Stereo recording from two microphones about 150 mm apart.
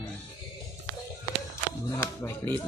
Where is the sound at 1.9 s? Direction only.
15° left (ahead or behind).